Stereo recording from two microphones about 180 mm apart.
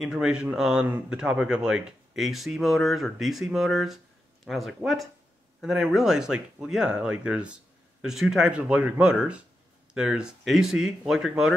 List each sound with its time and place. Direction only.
0.0 s speech: 5° right (ahead or behind)